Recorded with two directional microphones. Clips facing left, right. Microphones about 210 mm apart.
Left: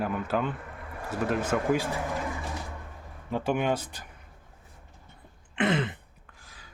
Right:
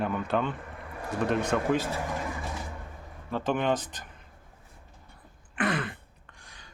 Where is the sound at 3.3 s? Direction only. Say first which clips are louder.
Even; 10° left (ahead or behind).